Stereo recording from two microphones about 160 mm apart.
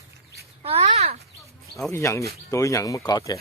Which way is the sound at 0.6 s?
40° right (ahead or behind).